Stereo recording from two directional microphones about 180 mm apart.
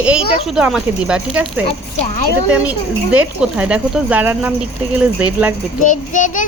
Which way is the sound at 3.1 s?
5° right (ahead or behind).